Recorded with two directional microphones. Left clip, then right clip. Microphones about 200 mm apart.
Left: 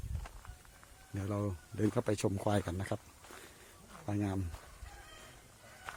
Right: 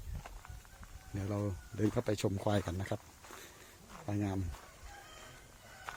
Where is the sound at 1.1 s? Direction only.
10° left (ahead or behind).